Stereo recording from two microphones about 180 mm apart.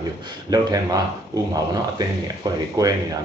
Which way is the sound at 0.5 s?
20° right (ahead or behind).